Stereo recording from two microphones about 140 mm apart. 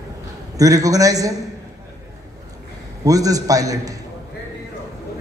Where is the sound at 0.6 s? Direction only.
25° right (ahead or behind).